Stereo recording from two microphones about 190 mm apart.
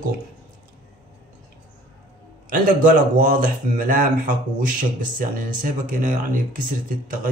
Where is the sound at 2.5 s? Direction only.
45° right (ahead or behind).